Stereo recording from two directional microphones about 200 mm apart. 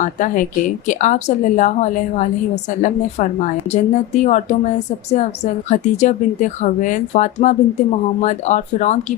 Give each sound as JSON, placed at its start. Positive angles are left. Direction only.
{"t": 0.0, "sound": "speech", "side_deg": 40}